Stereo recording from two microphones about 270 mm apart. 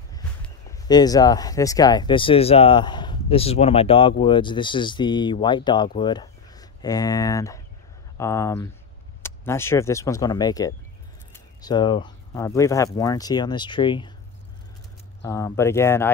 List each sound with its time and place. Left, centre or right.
0.7 s speech: centre
15.2 s speech: centre